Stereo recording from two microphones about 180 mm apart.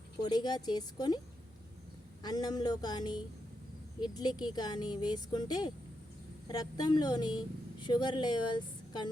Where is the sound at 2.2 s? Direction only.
20° left (ahead or behind).